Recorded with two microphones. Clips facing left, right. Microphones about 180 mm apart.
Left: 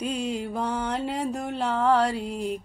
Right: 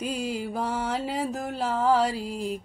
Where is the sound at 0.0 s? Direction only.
5° right (ahead or behind).